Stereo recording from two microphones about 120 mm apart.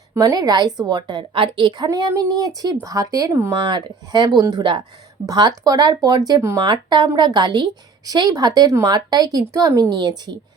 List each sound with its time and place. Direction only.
0.1 s a woman's voice: 30° right (ahead or behind)
3.6 s a woman's voice: 40° right (ahead or behind)